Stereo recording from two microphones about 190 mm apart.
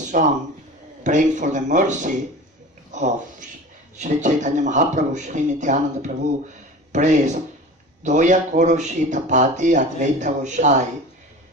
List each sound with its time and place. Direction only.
0.1 s speech: 45° right (ahead or behind)
4.0 s speech: 40° right (ahead or behind)